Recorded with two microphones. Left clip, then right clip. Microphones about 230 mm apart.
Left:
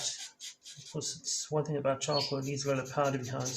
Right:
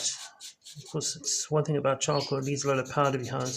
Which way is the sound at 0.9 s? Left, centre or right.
Right.